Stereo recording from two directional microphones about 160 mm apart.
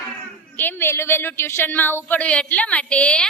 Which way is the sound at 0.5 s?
15° left (ahead or behind).